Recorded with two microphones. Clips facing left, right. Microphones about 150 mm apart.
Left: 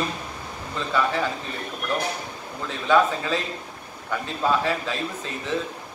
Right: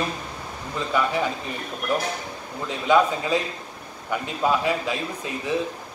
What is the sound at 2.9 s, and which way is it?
A man's voice, 15° right (ahead or behind).